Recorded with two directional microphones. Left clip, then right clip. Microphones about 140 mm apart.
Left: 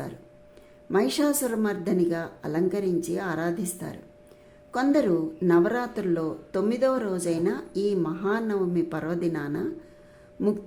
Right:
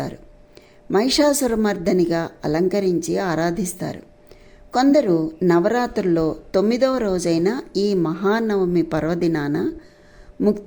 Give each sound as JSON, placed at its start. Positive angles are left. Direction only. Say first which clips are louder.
{"t": 0.9, "sound": "speech", "louder": "right 7 dB", "side_deg": -35}